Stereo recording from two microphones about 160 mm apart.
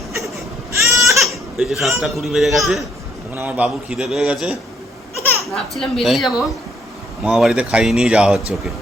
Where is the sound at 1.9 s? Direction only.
Centre (ahead or behind).